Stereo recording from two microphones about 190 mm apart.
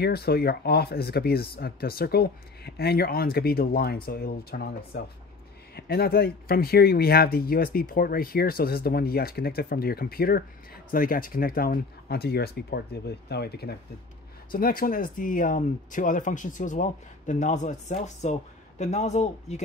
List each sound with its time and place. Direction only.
0.0 s speech: 55° left (ahead or behind); by 19.6 s 35° left (ahead or behind)